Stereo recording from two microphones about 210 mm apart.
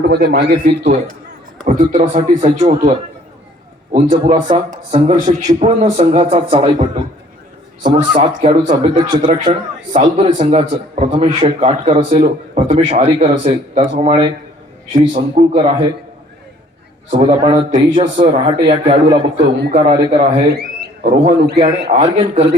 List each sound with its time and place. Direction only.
0.1 s a man's voice: 50° right (ahead or behind)
0.6 s a man's voice: 30° right (ahead or behind)
3.9 s a man's voice: 30° right (ahead or behind)
8.1 s a man's voice: 35° right (ahead or behind)
9.0 s a man's voice: 20° right (ahead or behind)
9.9 s a man's voice: 35° right (ahead or behind)
17.1 s a man's voice: 30° right (ahead or behind)
20.5 s a sound: 45° right (ahead or behind)
21.0 s a man's voice: 30° right (ahead or behind)